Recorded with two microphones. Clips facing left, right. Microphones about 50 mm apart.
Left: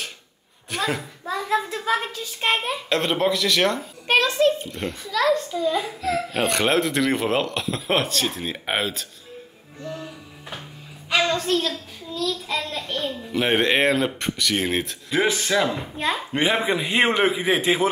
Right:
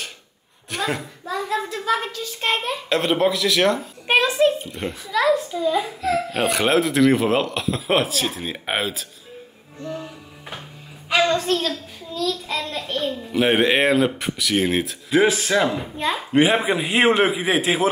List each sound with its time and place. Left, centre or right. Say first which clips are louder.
0.7 s a child's voice: even; centre
1.4 s a sound: left 2 dB; centre
2.0 s a child's voice: right 1 dB; centre
2.9 s a child's voice: right 2 dB; centre
4.1 s speech: right 1 dB; centre
4.6 s a child's voice: right 1 dB; centre
9.8 s music: right 2 dB; centre
11.1 s a child's voice: right 2 dB; centre